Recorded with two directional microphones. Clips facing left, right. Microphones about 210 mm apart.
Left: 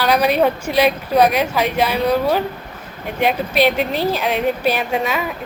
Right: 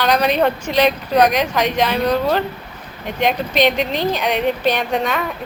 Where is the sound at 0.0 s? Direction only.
10° left (ahead or behind).